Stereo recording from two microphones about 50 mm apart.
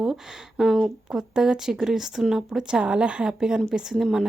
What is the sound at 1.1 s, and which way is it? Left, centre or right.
Speech, centre.